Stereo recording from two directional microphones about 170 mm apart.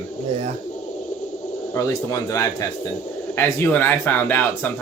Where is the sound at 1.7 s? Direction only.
20° left (ahead or behind).